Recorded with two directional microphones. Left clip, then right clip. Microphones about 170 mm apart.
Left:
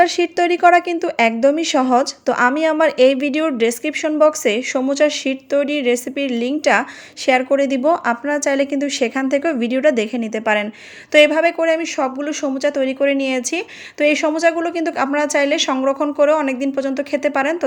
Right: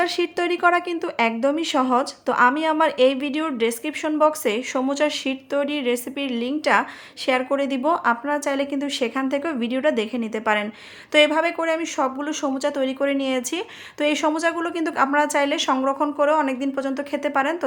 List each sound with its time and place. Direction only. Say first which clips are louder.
0.0 s a woman's voice: left 7 dB; 15° left (ahead or behind)